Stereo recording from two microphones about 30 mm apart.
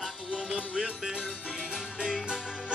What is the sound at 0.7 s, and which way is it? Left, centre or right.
Music, right.